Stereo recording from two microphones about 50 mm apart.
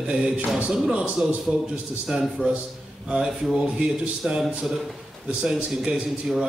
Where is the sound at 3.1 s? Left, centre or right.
Centre.